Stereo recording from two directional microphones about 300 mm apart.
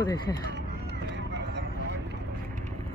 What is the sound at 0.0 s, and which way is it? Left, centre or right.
Speech, centre.